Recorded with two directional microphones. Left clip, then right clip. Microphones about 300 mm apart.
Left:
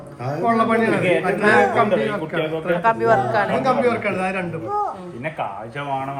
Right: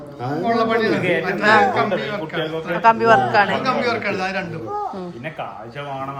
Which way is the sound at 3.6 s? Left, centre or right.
Centre.